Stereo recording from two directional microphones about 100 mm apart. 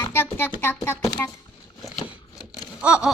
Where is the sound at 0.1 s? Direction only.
20° left (ahead or behind).